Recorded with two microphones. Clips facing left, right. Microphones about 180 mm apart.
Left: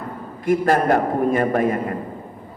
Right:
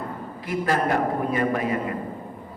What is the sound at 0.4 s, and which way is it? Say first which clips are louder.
Speech: left 6 dB; 50° left (ahead or behind).